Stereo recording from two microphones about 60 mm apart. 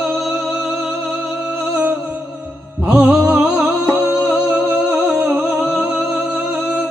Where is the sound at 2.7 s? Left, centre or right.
Centre.